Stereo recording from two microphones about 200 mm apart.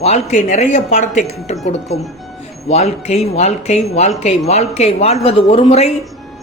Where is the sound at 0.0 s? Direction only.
35° left (ahead or behind).